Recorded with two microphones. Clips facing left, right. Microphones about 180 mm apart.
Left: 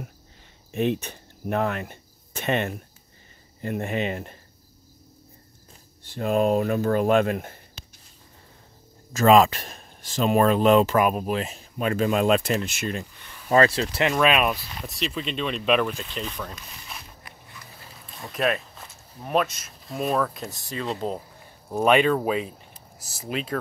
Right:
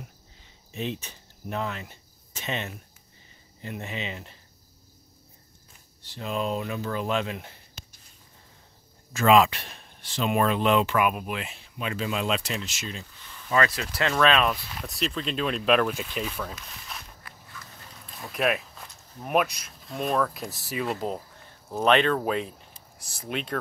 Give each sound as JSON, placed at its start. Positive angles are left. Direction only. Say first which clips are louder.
{"t": 0.7, "sound": "speech", "louder": "left 8 dB", "side_deg": 55}
{"t": 6.0, "sound": "speech", "louder": "left 8 dB", "side_deg": 50}
{"t": 9.1, "sound": "speech", "louder": "left 3 dB", "side_deg": 40}
{"t": 13.5, "sound": "speech", "louder": "left 6 dB", "side_deg": 30}
{"t": 14.0, "sound": "speech", "louder": "left 1 dB", "side_deg": 15}
{"t": 14.6, "sound": "speech", "louder": "even", "side_deg": 0}
{"t": 17.2, "sound": "a sound", "louder": "even", "side_deg": 20}
{"t": 17.7, "sound": "a sound", "louder": "left 1 dB", "side_deg": 5}
{"t": 19.3, "sound": "speech", "louder": "left 1 dB", "side_deg": 0}
{"t": 21.4, "sound": "speech", "louder": "left 4 dB", "side_deg": 15}